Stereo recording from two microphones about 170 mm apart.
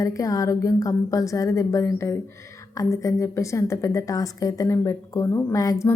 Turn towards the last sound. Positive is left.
turn(degrees=20)  # may be behind; listen again after turning